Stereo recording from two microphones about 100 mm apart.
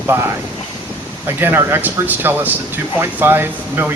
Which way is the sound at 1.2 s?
25° right (ahead or behind).